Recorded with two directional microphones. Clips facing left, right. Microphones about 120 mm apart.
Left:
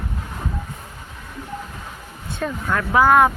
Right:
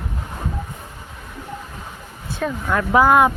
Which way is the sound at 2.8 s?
15° right (ahead or behind).